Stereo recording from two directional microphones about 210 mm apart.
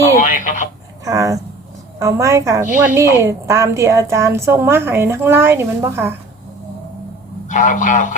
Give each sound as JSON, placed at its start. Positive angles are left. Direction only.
{"t": 0.2, "sound": "speech", "side_deg": 35}
{"t": 1.0, "sound": "a woman's voice", "side_deg": -15}
{"t": 7.4, "sound": "a man's voice", "side_deg": 35}